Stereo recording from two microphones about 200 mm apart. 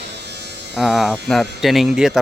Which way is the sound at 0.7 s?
Centre (ahead or behind).